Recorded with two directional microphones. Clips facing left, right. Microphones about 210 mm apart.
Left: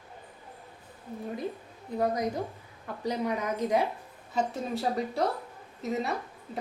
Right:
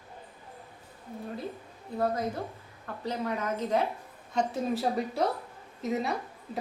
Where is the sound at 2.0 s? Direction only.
15° left (ahead or behind).